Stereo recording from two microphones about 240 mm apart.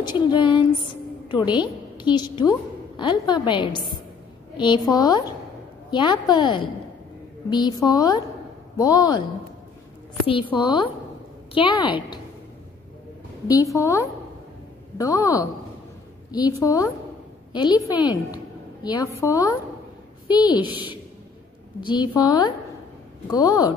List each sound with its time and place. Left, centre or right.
0.0 s a woman's voice: centre
10.2 s a woman's voice: left
13.7 s a woman's voice: centre
20.2 s a woman's voice: centre
21.8 s a woman's voice: centre